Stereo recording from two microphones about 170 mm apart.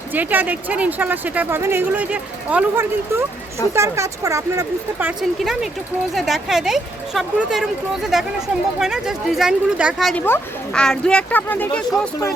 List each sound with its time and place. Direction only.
0.1 s speech: 10° right (ahead or behind); by 12.3 s 10° left (ahead or behind)